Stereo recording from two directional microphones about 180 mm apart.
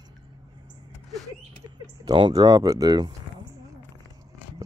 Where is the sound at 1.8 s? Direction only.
25° right (ahead or behind).